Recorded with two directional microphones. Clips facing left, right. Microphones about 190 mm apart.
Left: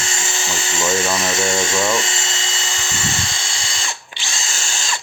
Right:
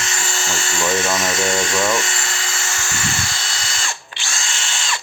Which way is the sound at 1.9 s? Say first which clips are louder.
Even; 25° left (ahead or behind).